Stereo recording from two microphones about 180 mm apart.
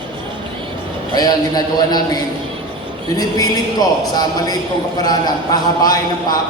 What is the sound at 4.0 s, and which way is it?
A man's voice, 20° left (ahead or behind).